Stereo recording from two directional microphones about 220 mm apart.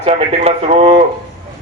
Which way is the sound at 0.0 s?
30° right (ahead or behind).